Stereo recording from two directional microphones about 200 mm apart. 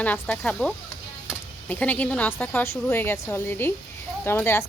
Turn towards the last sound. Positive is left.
turn(degrees=10)  # may be behind; listen again after turning